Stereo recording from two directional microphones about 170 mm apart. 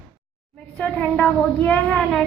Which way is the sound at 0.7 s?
5° left (ahead or behind).